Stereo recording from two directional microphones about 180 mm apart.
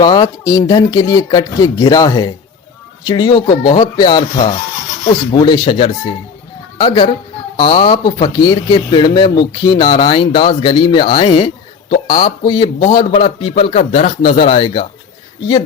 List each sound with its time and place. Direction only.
0.0 s speech: 20° left (ahead or behind)
5.3 s speech: 25° left (ahead or behind)